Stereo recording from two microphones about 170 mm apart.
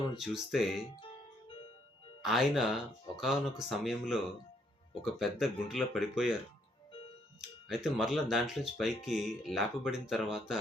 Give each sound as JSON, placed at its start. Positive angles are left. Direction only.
{"t": 0.2, "sound": "speech", "side_deg": 0}
{"t": 0.9, "sound": "music", "side_deg": 30}
{"t": 2.2, "sound": "speech", "side_deg": 0}
{"t": 7.7, "sound": "speech", "side_deg": 0}